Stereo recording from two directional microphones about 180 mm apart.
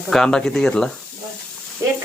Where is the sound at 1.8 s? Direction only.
15° right (ahead or behind).